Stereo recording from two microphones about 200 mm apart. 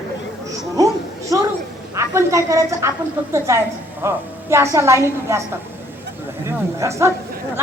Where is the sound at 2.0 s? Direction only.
15° right (ahead or behind).